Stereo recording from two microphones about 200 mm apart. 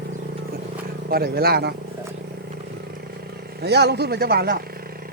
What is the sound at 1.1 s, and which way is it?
Speech, 50° right (ahead or behind).